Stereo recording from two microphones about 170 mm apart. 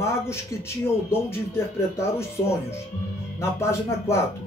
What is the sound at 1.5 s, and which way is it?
Speech, 15° left (ahead or behind).